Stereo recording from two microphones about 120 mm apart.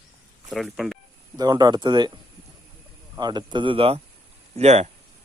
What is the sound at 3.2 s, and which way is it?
Speech, 35° right (ahead or behind).